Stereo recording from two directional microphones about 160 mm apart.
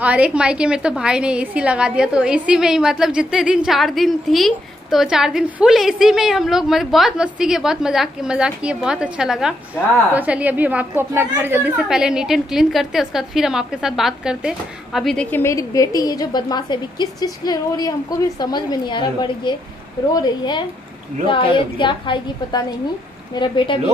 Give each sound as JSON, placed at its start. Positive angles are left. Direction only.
{"t": 0.0, "sound": "a woman's voice", "side_deg": -10}
{"t": 15.3, "sound": "a woman's voice", "side_deg": 20}